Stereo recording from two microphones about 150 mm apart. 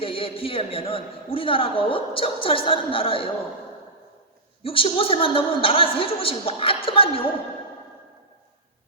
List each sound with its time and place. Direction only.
0.0 s a man's voice: 35° left (ahead or behind)
4.6 s a man's voice: 35° left (ahead or behind)